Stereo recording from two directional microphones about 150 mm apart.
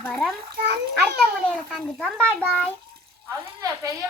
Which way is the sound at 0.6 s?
90° right.